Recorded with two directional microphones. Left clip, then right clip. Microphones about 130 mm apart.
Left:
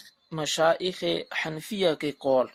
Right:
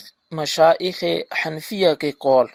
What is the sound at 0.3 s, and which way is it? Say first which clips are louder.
Speech: right 8 dB; 50° right (ahead or behind).